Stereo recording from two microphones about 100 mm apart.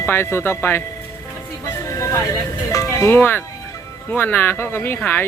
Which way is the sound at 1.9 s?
30° left (ahead or behind).